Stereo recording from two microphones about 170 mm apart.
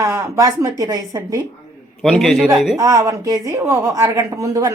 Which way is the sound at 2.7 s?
20° right (ahead or behind).